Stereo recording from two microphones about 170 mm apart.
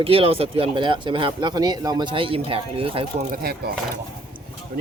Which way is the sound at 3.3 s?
65° right (ahead or behind).